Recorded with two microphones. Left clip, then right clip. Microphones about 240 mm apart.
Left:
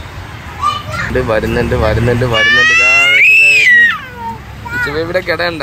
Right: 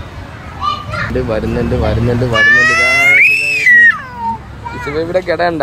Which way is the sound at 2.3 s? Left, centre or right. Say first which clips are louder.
Even; right.